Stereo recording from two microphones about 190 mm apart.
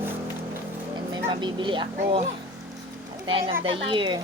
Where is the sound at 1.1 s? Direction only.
25° right (ahead or behind).